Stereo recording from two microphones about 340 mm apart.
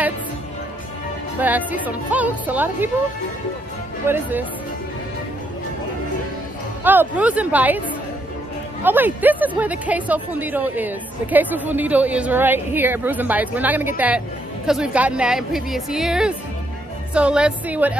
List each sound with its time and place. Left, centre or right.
1.4 s speech: centre
4.1 s speech: centre
6.8 s speech: centre
8.8 s speech: centre